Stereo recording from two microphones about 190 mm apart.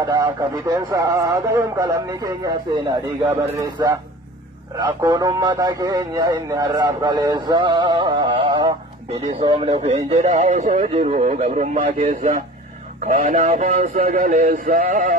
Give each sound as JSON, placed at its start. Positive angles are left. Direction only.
{"t": 0.0, "sound": "a man's voice", "side_deg": -15}
{"t": 10.3, "sound": "speech", "side_deg": -40}